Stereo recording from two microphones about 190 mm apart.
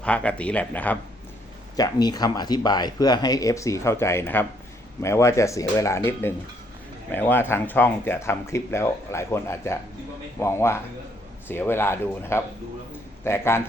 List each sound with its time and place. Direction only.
0.0 s speech: 5° left (ahead or behind)
1.7 s speech: 20° left (ahead or behind)